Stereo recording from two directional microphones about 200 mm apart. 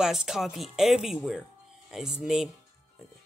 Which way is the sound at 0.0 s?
5° right (ahead or behind).